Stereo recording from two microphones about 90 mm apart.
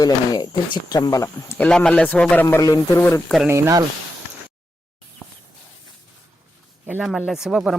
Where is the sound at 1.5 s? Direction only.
10° left (ahead or behind); by 3.2 s 25° left (ahead or behind).